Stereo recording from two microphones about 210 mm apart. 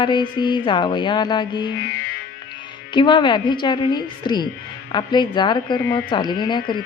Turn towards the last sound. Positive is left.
turn(degrees=20)  # may be behind; listen again after turning